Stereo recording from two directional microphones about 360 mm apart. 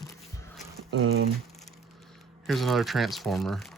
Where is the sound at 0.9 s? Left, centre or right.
Right.